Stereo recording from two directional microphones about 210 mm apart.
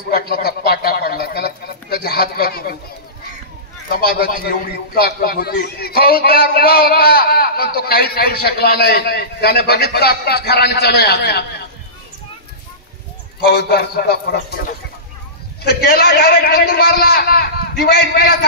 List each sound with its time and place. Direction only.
0.1 s a sound: 45° left (ahead or behind)
2.0 s a man's voice: 45° left (ahead or behind)
3.9 s a man's voice: 45° left (ahead or behind)
13.5 s a man's voice: 50° left (ahead or behind)
15.6 s a man's voice: 45° left (ahead or behind)